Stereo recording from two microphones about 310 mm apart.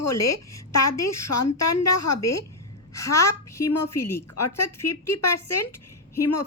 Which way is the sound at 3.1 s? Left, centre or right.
Centre.